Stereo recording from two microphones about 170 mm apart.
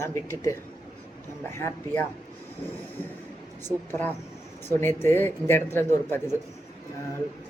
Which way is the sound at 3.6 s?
10° left (ahead or behind).